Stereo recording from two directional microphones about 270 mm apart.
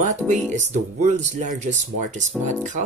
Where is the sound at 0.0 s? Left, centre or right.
Right.